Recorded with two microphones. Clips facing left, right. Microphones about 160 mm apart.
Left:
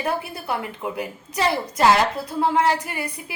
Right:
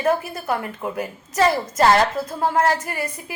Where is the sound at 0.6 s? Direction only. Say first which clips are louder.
Right 1 dB; 15° left (ahead or behind).